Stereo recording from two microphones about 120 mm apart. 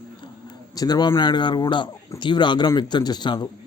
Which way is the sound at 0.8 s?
35° left (ahead or behind).